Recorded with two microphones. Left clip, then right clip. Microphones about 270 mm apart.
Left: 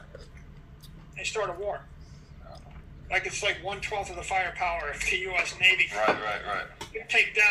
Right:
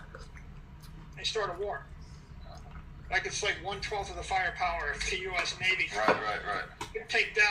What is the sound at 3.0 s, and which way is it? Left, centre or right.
Speech, centre.